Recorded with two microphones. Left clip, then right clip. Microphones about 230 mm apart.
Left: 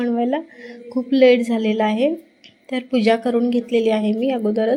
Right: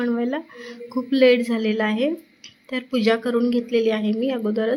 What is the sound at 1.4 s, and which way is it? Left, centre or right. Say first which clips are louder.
A woman's voice: left 3 dB; centre.